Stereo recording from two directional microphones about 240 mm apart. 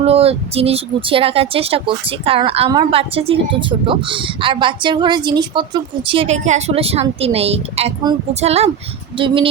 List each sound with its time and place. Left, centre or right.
0.0 s speech: right